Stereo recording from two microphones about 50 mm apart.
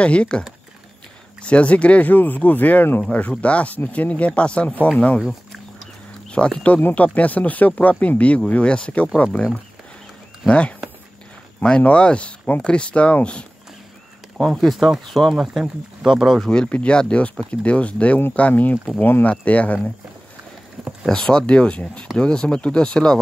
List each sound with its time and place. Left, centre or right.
0.0 s speech: left
1.4 s speech: left
3.1 s speech: left
6.3 s speech: left
10.4 s speech: left
11.8 s speech: left
14.5 s speech: centre
15.3 s speech: centre
16.4 s speech: left
20.8 s a sound: right
21.1 s speech: centre